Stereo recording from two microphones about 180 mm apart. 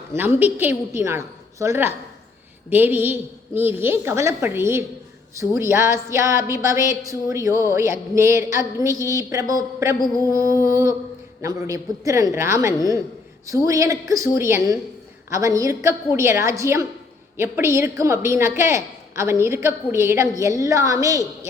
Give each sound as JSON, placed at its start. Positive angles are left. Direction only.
{"t": 0.1, "sound": "a woman's voice", "side_deg": -10}